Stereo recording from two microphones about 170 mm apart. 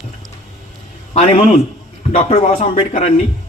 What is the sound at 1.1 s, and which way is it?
Speech, 40° left (ahead or behind).